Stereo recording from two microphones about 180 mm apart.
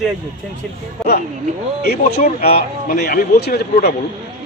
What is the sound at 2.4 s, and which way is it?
Speech, 60° left (ahead or behind).